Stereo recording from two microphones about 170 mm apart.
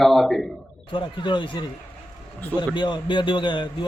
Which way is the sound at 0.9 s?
30° left (ahead or behind).